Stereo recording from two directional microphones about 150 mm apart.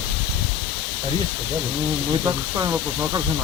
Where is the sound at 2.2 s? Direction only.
20° right (ahead or behind).